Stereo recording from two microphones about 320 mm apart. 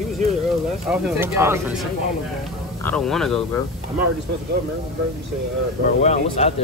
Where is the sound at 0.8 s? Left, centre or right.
Centre.